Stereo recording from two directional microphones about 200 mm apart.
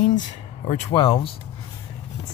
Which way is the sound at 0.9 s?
25° left (ahead or behind).